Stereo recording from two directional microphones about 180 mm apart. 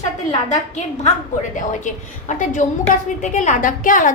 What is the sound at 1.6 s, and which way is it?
A woman's voice, 45° left (ahead or behind).